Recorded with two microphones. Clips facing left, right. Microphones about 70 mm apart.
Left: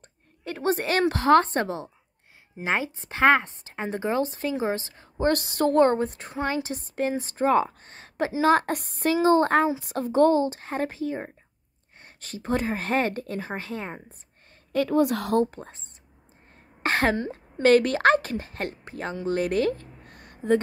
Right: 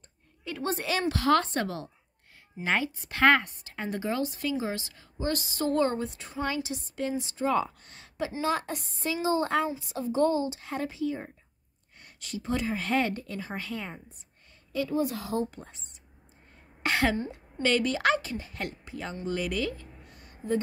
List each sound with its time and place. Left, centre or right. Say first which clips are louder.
0.5 s a woman's voice: left 5 dB; left
1.2 s speech: left 6 dB; left
8.5 s a woman's voice: left 10 dB; left
13.6 s a woman's voice: left 3 dB; left
14.7 s speech: left 7 dB; left
15.4 s speech: left 6 dB; left
16.8 s a sound: left 3 dB; left
17.6 s a woman's voice: left 8 dB; left
19.2 s a sound: left 7 dB; left